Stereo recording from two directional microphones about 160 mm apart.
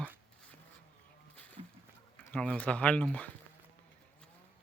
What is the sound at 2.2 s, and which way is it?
Speech, 10° left (ahead or behind).